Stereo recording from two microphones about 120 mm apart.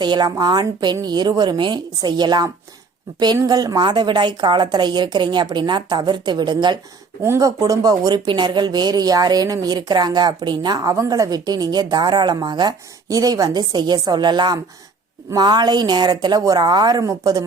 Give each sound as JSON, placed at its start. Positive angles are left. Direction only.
{"t": 0.0, "sound": "speech", "side_deg": -35}
{"t": 7.2, "sound": "speech", "side_deg": -25}